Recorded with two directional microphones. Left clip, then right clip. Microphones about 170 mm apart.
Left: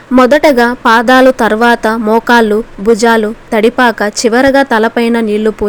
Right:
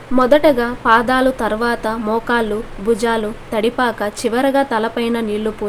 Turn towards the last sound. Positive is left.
turn(degrees=45)  # may be behind; listen again after turning